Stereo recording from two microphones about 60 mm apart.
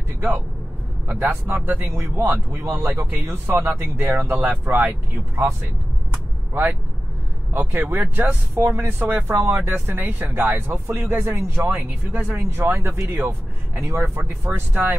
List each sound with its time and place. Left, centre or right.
1.0 s speech: right
6.5 s speech: right
8.6 s speech: right
11.6 s speech: right
12.4 s speech: right
14.2 s speech: right